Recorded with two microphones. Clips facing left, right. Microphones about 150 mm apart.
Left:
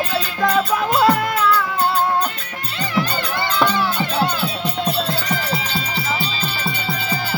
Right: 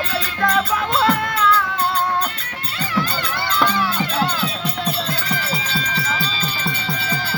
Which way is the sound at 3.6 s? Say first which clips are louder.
Left 1 dB; 15° left (ahead or behind).